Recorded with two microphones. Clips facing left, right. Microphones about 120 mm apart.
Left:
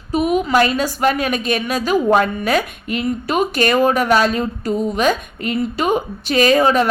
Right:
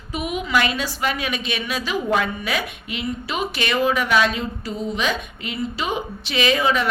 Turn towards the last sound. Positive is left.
turn(degrees=45)  # may be behind; listen again after turning